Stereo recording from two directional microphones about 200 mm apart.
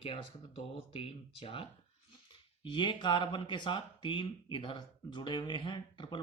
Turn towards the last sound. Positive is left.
turn(degrees=25)  # may be behind; listen again after turning